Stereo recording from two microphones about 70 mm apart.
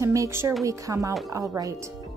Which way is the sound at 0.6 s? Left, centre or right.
Right.